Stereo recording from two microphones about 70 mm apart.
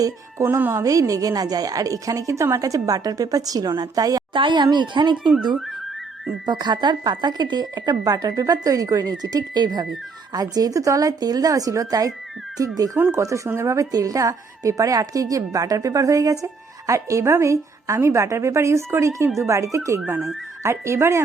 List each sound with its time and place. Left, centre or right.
0.3 s speech: right
0.9 s a woman's voice: right
6.4 s speech: right
8.0 s a woman's voice: right
9.6 s speech: right
10.3 s a woman's voice: right
13.0 s speech: right
13.2 s a woman's voice: right
13.9 s a woman's voice: right